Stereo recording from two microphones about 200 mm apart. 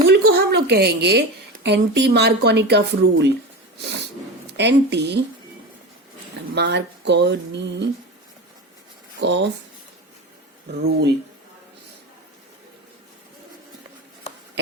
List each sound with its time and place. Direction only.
0.1 s a sound: 50° right (ahead or behind)
1.6 s speech: 55° right (ahead or behind)
4.5 s speech: 60° right (ahead or behind)
6.5 s speech: 60° right (ahead or behind)
9.2 s speech: 60° right (ahead or behind)
10.8 s speech: 55° right (ahead or behind)